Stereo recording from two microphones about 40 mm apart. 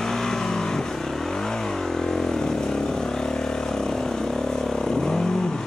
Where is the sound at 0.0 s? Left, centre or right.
Centre.